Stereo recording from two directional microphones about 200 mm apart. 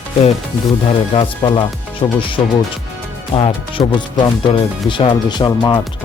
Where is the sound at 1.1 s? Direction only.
25° left (ahead or behind).